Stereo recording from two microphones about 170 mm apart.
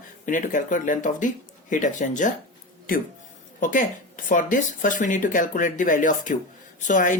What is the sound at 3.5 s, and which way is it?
Speech, 50° left (ahead or behind).